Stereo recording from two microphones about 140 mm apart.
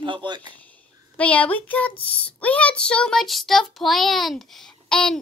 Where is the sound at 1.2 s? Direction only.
10° left (ahead or behind).